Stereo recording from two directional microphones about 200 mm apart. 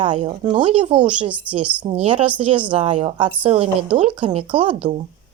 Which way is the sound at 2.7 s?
35° right (ahead or behind).